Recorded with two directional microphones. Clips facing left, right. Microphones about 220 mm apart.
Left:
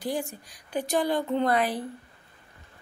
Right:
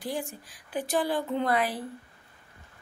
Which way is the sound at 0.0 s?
Centre (ahead or behind).